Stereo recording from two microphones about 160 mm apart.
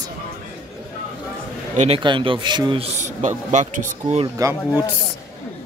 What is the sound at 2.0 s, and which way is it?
Speech, 30° right (ahead or behind).